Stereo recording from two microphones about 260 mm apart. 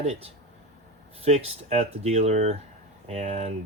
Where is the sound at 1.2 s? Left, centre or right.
Right.